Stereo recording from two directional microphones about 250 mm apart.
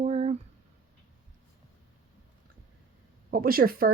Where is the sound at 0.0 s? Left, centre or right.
Right.